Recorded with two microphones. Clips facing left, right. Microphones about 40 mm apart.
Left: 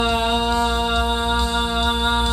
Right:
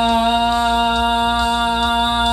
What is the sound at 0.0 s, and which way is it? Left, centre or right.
Music, centre.